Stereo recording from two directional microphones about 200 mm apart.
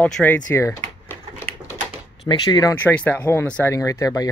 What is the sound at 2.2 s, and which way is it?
Speech, 20° left (ahead or behind).